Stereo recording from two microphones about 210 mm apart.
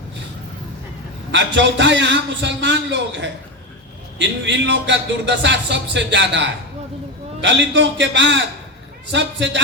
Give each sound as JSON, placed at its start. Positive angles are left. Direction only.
{"t": 1.3, "sound": "speech", "side_deg": -60}